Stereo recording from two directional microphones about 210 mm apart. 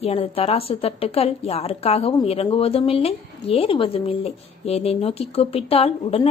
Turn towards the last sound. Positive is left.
turn(degrees=30)  # may be behind; listen again after turning